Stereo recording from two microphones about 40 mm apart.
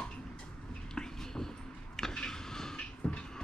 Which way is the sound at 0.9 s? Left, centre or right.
Centre.